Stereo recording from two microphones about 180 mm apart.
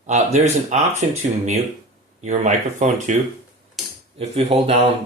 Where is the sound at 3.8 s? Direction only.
Centre (ahead or behind).